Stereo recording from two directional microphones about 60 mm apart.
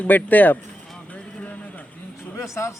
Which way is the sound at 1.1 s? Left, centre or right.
Left.